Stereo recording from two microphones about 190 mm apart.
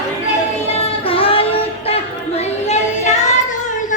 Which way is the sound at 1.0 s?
30° left (ahead or behind).